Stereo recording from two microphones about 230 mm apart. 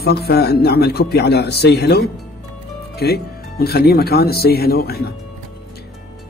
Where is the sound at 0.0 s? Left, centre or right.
Left.